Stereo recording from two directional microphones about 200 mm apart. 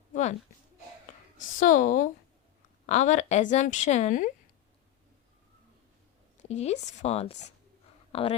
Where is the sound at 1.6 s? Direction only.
40° left (ahead or behind).